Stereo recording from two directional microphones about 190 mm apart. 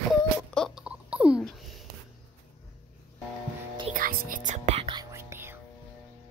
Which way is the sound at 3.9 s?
50° right (ahead or behind).